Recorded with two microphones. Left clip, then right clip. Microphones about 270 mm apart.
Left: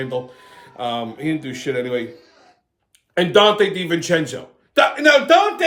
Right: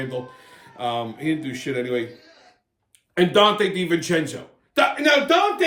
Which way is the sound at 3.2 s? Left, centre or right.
Centre.